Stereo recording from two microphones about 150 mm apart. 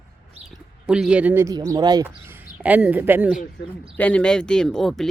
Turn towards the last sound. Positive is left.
turn(degrees=0)  # may be behind; listen again after turning